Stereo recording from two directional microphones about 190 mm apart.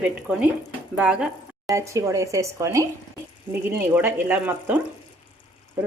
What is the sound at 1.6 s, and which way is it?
A woman's voice, 15° right (ahead or behind).